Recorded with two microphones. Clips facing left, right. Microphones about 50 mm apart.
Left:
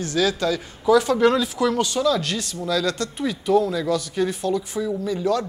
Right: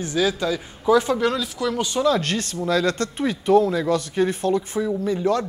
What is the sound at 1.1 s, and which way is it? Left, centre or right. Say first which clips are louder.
Speech: left 4 dB; centre.